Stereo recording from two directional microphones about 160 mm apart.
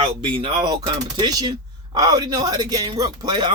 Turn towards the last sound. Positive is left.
turn(degrees=-25)  # may be behind; listen again after turning